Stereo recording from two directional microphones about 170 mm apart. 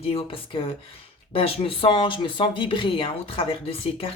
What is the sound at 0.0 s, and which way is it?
Speech, 35° left (ahead or behind).